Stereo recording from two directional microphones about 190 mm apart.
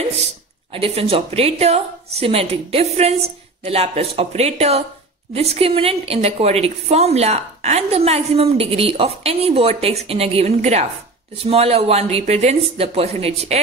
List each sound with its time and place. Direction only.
0.7 s a woman's voice: 30° right (ahead or behind)